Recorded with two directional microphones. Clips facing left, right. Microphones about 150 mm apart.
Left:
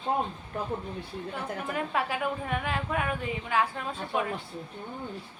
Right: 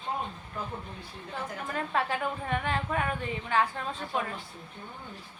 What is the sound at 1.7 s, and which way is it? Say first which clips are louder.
A woman's voice: right 1 dB; 10° left (ahead or behind).